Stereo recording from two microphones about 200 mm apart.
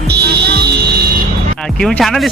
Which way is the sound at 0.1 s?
55° right (ahead or behind).